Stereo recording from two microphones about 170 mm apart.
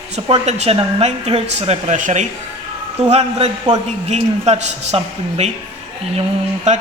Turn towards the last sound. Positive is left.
turn(degrees=-45)  # may be behind; listen again after turning